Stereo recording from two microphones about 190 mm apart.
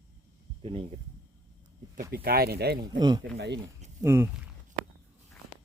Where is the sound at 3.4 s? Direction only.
65° right (ahead or behind).